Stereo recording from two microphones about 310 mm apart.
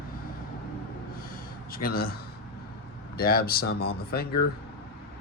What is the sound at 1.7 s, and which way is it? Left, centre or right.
Speech, left.